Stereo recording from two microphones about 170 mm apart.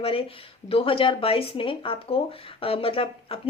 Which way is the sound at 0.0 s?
30° left (ahead or behind).